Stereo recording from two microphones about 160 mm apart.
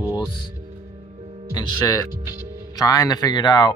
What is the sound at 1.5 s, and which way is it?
Speech, 20° left (ahead or behind).